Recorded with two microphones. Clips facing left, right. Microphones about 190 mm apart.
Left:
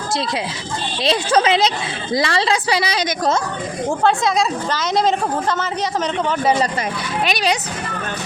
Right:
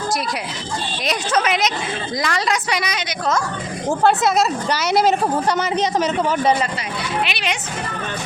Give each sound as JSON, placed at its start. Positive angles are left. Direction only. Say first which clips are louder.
{"t": 1.0, "sound": "a woman's voice", "louder": "left 5 dB", "side_deg": 30}
{"t": 3.8, "sound": "a woman's voice", "louder": "right 1 dB", "side_deg": -5}
{"t": 7.3, "sound": "a woman's voice", "louder": "left 6 dB", "side_deg": 40}